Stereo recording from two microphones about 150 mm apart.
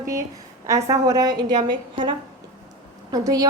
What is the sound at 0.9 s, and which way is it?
A woman's voice, 25° right (ahead or behind).